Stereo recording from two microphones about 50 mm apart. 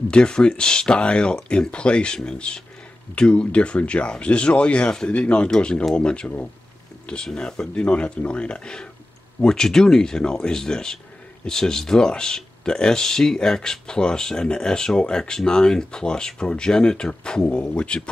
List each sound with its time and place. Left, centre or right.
0.1 s speech: centre
7.3 s speech: centre